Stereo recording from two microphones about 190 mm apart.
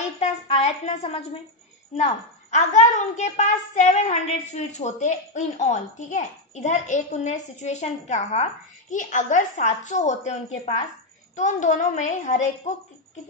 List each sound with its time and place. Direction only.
0.2 s a woman's voice: 30° left (ahead or behind)